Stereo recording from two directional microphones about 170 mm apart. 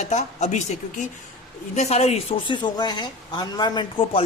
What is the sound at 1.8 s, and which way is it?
A woman's voice, 40° left (ahead or behind).